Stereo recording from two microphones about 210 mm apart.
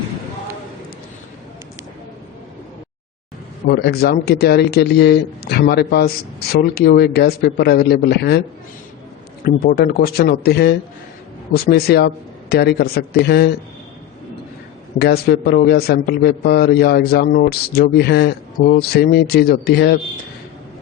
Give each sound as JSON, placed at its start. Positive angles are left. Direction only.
{"t": 3.7, "sound": "a man's voice", "side_deg": 50}
{"t": 9.4, "sound": "a man's voice", "side_deg": 45}
{"t": 14.9, "sound": "a man's voice", "side_deg": 50}